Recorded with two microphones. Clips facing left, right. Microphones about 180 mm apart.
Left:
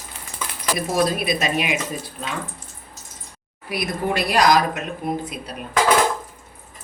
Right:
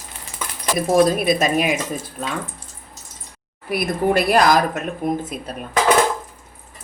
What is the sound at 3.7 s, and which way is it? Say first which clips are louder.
A woman's voice: right 5 dB; 55° right (ahead or behind).